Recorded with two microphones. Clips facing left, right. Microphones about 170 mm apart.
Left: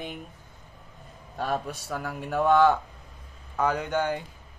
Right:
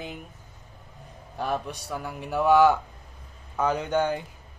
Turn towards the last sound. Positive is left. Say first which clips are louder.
# right 2 dB
turn(degrees=-20)  # may be behind; listen again after turning